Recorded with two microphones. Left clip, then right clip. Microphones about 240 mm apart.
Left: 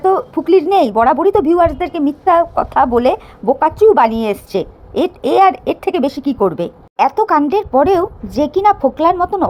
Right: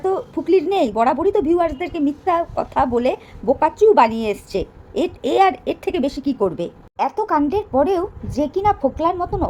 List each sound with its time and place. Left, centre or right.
0.0 s speech: centre